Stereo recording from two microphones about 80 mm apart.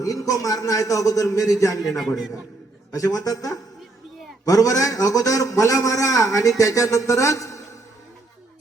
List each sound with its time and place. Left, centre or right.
0.0 s a man's voice: left
2.0 s a man's voice: centre
2.9 s a man's voice: left